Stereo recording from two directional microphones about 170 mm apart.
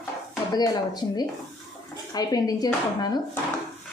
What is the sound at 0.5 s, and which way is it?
Speech, 20° left (ahead or behind).